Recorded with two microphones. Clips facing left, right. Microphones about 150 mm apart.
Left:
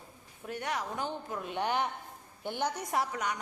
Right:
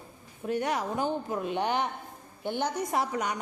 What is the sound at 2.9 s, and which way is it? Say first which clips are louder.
Speech: right 3 dB; 20° right (ahead or behind).